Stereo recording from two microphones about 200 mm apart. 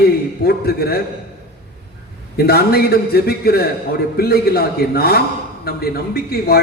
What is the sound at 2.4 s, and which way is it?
A man's voice, 50° left (ahead or behind).